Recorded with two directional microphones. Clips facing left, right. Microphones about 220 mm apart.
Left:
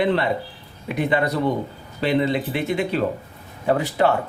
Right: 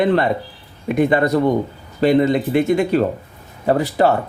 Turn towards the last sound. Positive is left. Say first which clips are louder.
# right 3 dB
turn(degrees=-40)  # may be behind; listen again after turning